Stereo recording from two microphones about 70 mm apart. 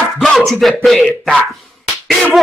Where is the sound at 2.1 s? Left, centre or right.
Centre.